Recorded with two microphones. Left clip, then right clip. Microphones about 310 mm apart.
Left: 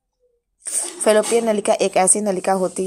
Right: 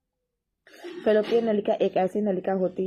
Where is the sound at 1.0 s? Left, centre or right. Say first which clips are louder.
Left 6 dB; centre.